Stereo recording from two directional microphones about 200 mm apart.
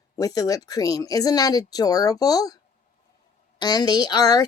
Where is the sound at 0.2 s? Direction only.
20° left (ahead or behind).